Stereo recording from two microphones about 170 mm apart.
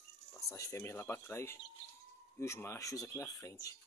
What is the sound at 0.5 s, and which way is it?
Speech, 20° left (ahead or behind).